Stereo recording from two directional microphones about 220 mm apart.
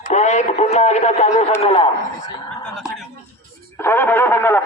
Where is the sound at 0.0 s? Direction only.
30° left (ahead or behind).